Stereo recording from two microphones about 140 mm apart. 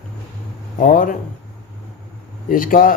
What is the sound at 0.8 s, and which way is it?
Speech, 75° left (ahead or behind).